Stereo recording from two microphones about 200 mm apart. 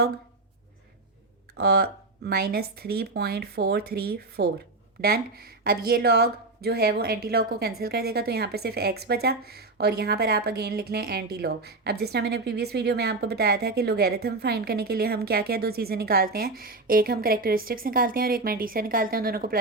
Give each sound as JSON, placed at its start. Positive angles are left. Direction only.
{"t": 1.5, "sound": "speech", "side_deg": -50}